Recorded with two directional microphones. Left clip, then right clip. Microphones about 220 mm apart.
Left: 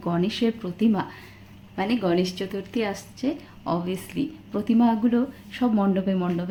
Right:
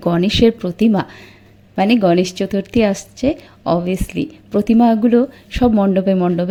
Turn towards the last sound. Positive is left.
turn(degrees=-35)  # may be behind; listen again after turning